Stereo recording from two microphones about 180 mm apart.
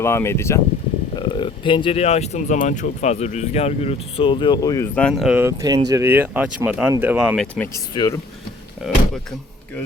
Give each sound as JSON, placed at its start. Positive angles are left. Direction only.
{"t": 0.0, "sound": "speech", "side_deg": 15}
{"t": 1.1, "sound": "speech", "side_deg": 25}
{"t": 4.9, "sound": "speech", "side_deg": 0}
{"t": 7.6, "sound": "speech", "side_deg": 20}
{"t": 8.8, "sound": "speech", "side_deg": 0}